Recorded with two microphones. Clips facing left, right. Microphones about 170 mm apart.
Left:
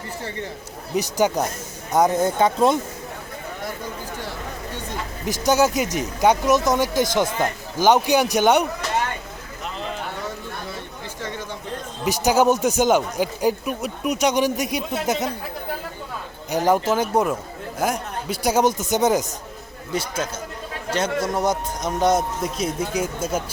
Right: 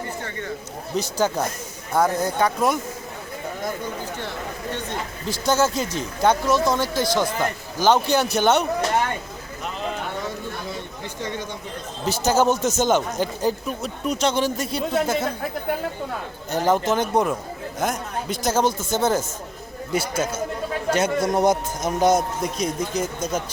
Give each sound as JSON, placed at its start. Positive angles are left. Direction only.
{"t": 0.3, "sound": "speech", "side_deg": 30}
{"t": 0.9, "sound": "speech", "side_deg": 15}
{"t": 5.2, "sound": "speech", "side_deg": 15}
{"t": 12.0, "sound": "speech", "side_deg": 15}
{"t": 16.5, "sound": "speech", "side_deg": 10}
{"t": 19.9, "sound": "a man's voice", "side_deg": -10}